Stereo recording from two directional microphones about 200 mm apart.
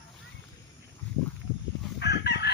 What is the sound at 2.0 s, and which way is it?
Chicken, 55° left (ahead or behind).